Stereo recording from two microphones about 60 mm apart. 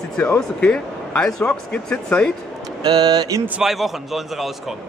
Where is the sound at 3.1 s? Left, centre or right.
Right.